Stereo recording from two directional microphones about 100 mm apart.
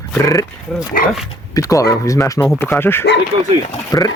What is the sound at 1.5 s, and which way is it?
Speech, 35° left (ahead or behind).